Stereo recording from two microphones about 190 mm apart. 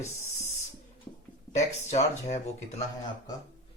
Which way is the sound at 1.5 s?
35° left (ahead or behind).